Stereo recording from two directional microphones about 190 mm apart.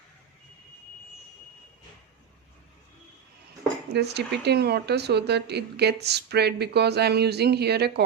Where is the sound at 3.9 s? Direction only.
60° right (ahead or behind).